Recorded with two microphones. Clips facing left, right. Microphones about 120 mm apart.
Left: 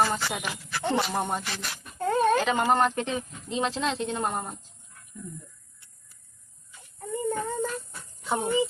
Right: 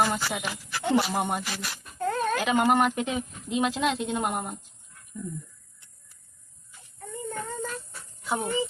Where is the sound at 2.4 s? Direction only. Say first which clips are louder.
Right 1 dB; 10° right (ahead or behind).